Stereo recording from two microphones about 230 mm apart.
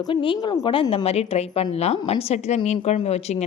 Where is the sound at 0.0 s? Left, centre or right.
Left.